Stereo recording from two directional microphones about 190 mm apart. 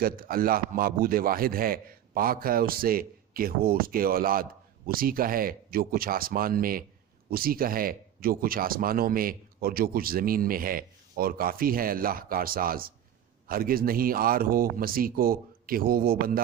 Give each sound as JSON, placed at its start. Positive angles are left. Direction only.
{"t": 0.0, "sound": "speech", "side_deg": -50}